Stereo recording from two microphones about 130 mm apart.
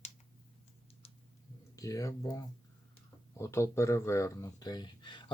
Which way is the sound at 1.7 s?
25° left (ahead or behind).